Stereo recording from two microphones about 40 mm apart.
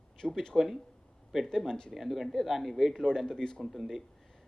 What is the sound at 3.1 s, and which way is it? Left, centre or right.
Speech, centre.